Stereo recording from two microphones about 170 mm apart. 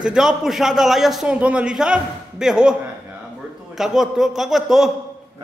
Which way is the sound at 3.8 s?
5° right (ahead or behind).